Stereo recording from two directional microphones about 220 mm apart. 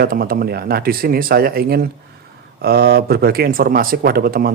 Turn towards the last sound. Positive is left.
turn(degrees=-45)  # may be behind; listen again after turning